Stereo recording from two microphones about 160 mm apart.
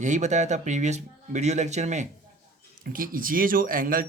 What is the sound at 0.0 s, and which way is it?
Speech, 50° right (ahead or behind).